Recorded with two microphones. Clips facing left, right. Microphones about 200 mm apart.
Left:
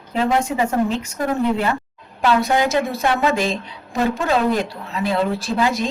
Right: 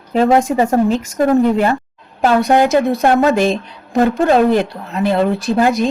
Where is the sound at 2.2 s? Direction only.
50° right (ahead or behind).